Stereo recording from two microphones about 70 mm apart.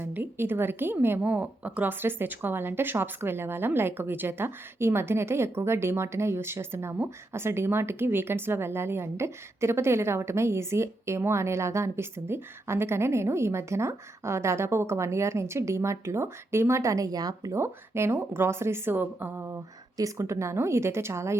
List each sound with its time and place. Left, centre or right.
0.0 s a woman's voice: right
17.5 s a woman's voice: right
20.0 s a woman's voice: right